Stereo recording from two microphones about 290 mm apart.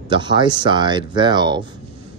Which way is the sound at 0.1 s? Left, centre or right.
Centre.